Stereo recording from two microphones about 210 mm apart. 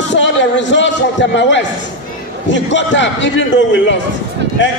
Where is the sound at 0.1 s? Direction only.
60° left (ahead or behind).